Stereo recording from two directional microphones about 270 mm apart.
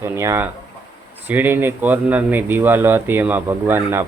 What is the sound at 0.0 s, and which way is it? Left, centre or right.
A man's voice, centre.